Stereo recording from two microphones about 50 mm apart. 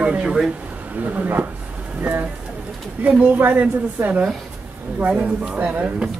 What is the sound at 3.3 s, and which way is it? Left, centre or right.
Speech, right.